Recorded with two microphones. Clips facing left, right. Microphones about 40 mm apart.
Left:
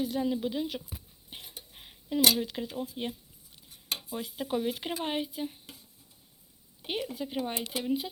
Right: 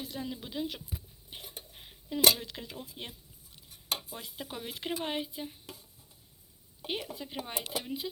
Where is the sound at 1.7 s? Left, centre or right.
Centre.